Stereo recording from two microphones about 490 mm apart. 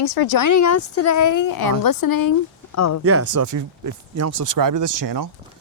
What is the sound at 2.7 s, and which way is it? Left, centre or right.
Speech, left.